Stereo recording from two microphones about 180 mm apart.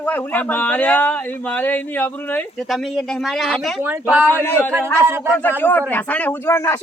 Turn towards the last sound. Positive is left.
turn(degrees=15)  # may be behind; listen again after turning